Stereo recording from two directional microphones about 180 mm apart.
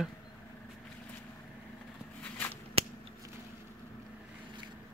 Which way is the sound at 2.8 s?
35° right (ahead or behind).